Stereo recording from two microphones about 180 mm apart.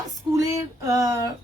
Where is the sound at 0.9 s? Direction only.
20° right (ahead or behind).